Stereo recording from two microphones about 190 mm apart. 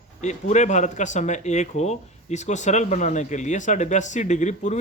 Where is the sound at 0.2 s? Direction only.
40° left (ahead or behind).